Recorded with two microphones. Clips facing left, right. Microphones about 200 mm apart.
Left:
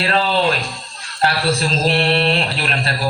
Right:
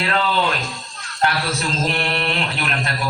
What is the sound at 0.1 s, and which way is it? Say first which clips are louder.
A man's voice: left 3 dB; 35° left (ahead or behind).